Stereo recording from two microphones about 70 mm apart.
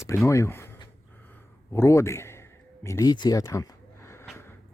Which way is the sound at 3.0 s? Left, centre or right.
Left.